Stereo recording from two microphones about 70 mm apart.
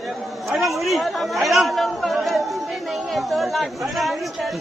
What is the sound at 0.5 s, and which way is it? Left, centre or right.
Chatter, centre.